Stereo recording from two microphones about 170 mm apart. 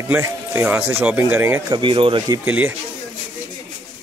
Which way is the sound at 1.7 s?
30° right (ahead or behind).